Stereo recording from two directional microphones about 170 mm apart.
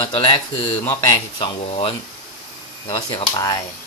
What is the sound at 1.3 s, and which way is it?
Speech, 30° left (ahead or behind).